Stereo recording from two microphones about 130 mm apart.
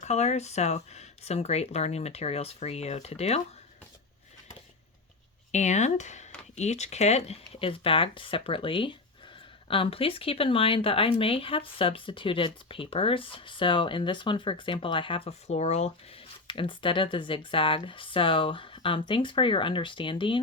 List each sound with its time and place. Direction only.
0.0 s speech: 60° left (ahead or behind)
5.5 s speech: 65° left (ahead or behind); by 20.4 s 40° left (ahead or behind)